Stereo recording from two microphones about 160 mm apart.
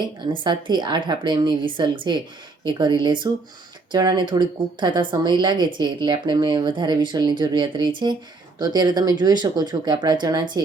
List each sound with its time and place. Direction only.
0.0 s speech: 30° right (ahead or behind)